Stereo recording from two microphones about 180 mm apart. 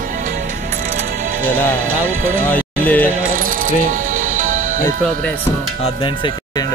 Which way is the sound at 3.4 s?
50° right (ahead or behind).